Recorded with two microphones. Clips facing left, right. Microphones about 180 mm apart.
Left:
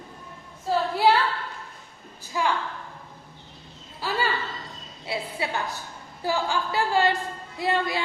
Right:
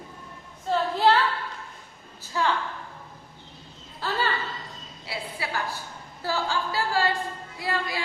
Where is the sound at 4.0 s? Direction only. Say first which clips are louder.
Left 1 dB; 10° left (ahead or behind).